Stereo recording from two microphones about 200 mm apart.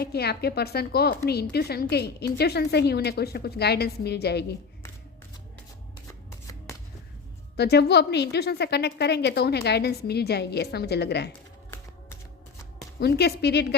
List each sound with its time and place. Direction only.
0.0 s a woman's voice: 55° left (ahead or behind)
7.5 s a woman's voice: 55° left (ahead or behind)
11.3 s typing: 10° left (ahead or behind)
13.0 s a woman's voice: 55° left (ahead or behind)